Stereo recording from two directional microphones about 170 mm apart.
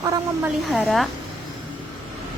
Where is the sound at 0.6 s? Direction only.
Centre (ahead or behind).